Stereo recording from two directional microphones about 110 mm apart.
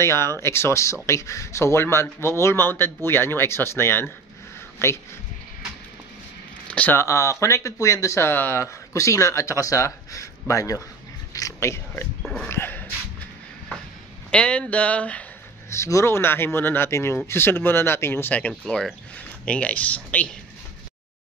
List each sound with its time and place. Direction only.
0.0 s speech: 25° left (ahead or behind)
6.7 s speech: 10° left (ahead or behind)
7.0 s speech: 25° left (ahead or behind)
12.2 s speech: 5° left (ahead or behind)
12.4 s speech: 20° left (ahead or behind)
14.3 s speech: 10° left (ahead or behind)
15.7 s speech: 25° left (ahead or behind)